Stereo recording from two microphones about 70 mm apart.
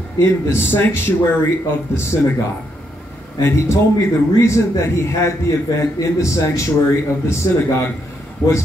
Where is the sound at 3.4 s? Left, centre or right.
Left.